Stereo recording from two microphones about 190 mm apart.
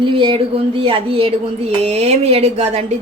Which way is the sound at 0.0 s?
25° right (ahead or behind).